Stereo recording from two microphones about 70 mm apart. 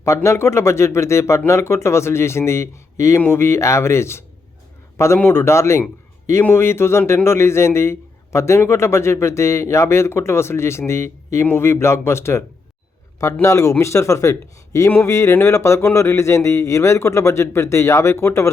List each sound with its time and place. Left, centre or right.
0.0 s a man's voice: left
13.4 s speech: left
14.8 s a man's voice: left